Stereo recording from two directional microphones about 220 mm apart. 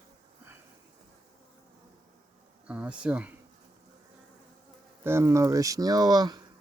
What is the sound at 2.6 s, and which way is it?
Insect, 5° right (ahead or behind).